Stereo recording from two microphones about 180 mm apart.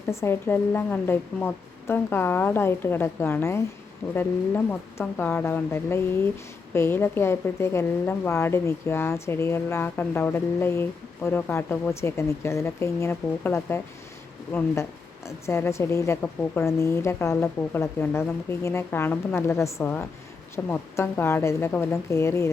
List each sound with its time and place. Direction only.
0.1 s a woman's voice: 15° left (ahead or behind)
15.4 s a woman's voice: 15° left (ahead or behind)